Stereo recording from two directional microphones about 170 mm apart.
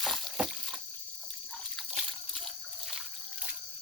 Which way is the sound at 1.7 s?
Centre (ahead or behind).